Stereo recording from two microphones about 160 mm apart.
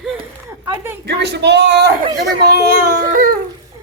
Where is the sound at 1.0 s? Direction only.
90° right.